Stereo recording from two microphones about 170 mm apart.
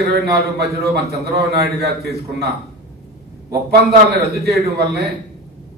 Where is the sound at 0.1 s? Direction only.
65° right (ahead or behind).